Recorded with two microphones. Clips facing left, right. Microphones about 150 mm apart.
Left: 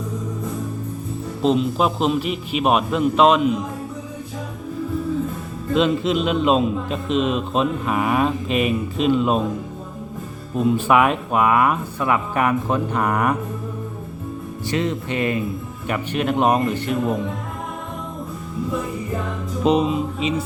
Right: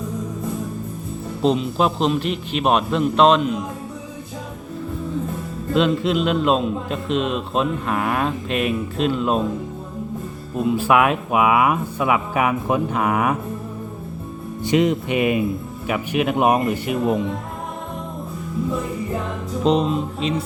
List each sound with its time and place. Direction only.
1.4 s a man's voice: centre (ahead or behind)
5.7 s a man's voice: centre (ahead or behind)
10.6 s a man's voice: 5° right (ahead or behind)
14.6 s speech: 15° right (ahead or behind)
19.6 s a man's voice: 5° left (ahead or behind)